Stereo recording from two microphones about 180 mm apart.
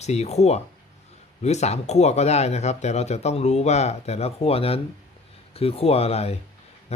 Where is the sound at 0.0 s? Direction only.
35° left (ahead or behind).